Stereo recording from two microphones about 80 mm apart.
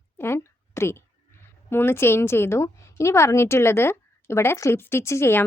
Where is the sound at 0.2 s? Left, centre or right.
Left.